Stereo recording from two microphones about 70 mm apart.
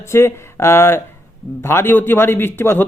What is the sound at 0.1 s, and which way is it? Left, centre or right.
Speech, left.